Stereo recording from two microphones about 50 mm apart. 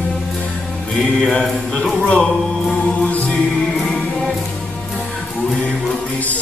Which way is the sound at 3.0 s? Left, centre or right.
Left.